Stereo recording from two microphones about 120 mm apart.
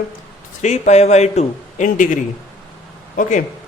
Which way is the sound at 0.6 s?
70° left (ahead or behind).